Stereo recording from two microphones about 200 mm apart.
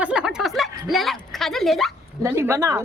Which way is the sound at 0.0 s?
5° right (ahead or behind).